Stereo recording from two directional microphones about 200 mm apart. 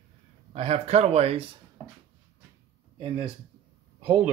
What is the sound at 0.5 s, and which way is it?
Speech, 30° right (ahead or behind).